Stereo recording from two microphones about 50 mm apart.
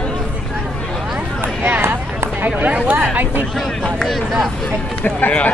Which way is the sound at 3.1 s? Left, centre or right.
Right.